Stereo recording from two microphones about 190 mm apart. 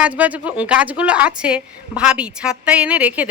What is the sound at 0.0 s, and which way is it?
A woman's voice, 10° right (ahead or behind).